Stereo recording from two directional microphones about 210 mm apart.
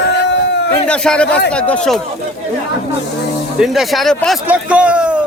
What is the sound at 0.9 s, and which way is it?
A man's voice, 5° left (ahead or behind).